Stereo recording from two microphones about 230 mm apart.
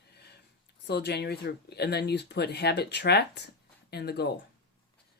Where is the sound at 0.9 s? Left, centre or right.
Left.